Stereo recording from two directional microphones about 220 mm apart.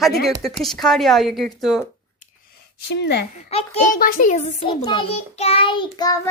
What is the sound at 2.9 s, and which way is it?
Speech, 50° left (ahead or behind).